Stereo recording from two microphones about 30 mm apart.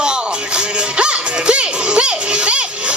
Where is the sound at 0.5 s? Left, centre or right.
Right.